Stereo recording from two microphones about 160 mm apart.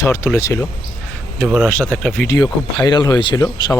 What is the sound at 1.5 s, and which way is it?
Speech, centre (ahead or behind).